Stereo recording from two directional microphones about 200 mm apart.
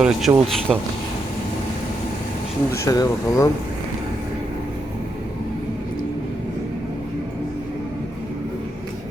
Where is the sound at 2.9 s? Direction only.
15° left (ahead or behind).